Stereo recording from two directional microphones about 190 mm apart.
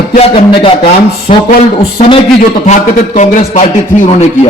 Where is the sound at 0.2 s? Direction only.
30° left (ahead or behind).